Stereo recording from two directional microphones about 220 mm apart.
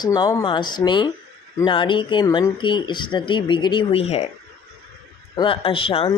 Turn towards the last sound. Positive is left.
turn(degrees=25)  # may be behind; listen again after turning